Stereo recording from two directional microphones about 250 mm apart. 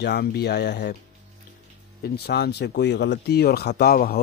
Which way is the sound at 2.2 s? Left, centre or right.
Left.